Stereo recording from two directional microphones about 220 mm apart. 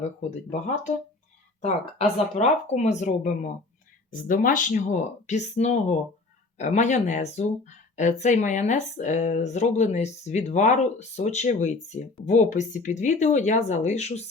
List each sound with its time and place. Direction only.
0.0 s speech: 35° left (ahead or behind)